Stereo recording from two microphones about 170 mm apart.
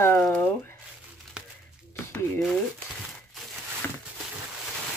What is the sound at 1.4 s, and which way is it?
Crumpling, 5° right (ahead or behind).